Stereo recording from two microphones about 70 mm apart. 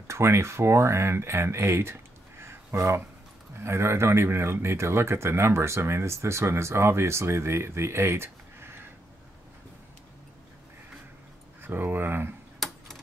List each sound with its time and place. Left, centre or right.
0.1 s speech: right
11.6 s speech: right
12.5 s a sound: centre